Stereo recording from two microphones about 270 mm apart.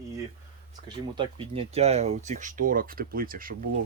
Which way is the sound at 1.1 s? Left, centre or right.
Right.